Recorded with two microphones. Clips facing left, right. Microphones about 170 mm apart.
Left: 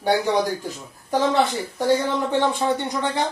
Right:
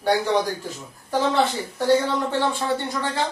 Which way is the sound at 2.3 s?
20° left (ahead or behind).